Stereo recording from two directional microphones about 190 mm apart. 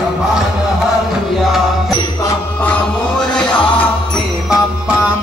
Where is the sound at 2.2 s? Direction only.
5° left (ahead or behind).